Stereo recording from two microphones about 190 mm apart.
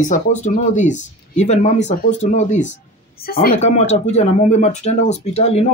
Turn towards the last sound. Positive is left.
turn(degrees=35)  # may be behind; listen again after turning